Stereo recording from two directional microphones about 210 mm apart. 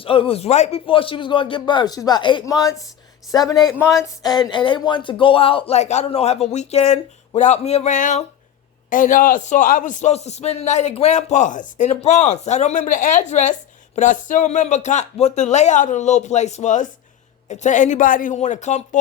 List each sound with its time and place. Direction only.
0.0 s a man's voice: 25° left (ahead or behind)